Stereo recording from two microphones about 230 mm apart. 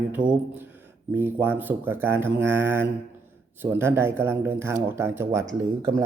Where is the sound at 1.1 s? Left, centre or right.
Centre.